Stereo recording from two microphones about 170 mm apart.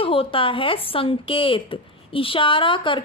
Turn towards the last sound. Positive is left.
turn(degrees=30)  # may be behind; listen again after turning